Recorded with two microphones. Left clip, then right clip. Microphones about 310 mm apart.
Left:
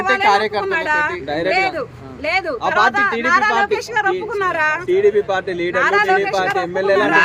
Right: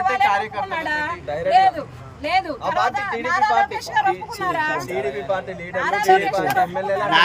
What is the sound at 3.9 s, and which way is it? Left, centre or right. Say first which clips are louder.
Speech: left 2 dB; centre.